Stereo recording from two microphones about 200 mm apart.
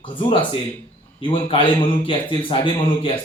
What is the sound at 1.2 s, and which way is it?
A man's voice, 25° left (ahead or behind).